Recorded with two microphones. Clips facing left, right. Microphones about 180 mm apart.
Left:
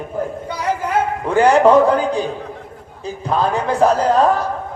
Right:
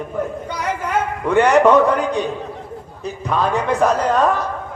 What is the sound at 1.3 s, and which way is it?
A man's voice, 30° left (ahead or behind).